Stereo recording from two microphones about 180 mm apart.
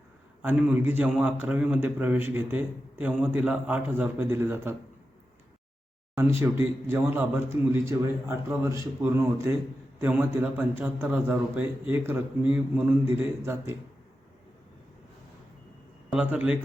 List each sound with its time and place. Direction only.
0.4 s a man's voice: 10° right (ahead or behind)
6.1 s a man's voice: 15° right (ahead or behind)
16.1 s a man's voice: 10° right (ahead or behind)